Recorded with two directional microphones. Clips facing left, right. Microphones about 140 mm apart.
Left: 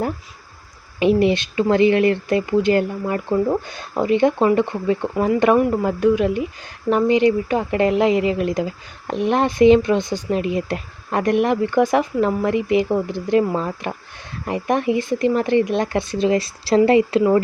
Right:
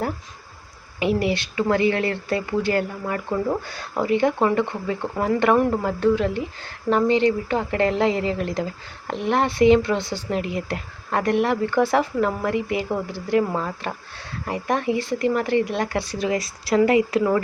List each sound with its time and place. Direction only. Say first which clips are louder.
0.9 s speech: left 6 dB; 20° left (ahead or behind)